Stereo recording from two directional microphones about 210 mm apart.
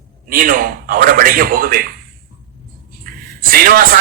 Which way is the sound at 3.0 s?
45° right (ahead or behind).